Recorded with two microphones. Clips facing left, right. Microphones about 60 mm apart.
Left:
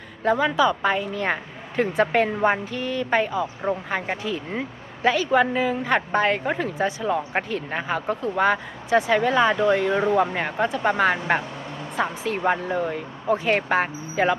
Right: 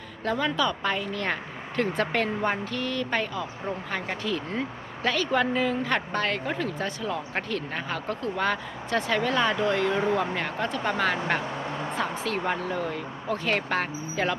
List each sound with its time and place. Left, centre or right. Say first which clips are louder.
0.3 s a woman's voice: left 6 dB; centre